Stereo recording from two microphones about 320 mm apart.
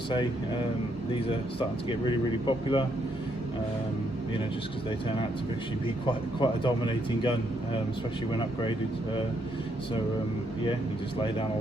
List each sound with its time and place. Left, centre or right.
1.1 s speech: centre
4.9 s speech: centre